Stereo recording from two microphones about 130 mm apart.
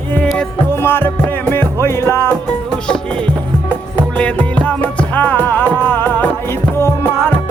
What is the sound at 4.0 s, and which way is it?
Music, 10° left (ahead or behind).